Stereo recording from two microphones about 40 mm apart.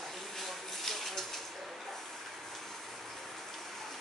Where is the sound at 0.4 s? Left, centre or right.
Centre.